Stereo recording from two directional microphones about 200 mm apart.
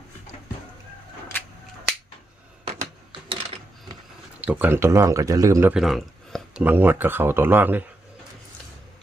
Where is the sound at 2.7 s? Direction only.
25° right (ahead or behind).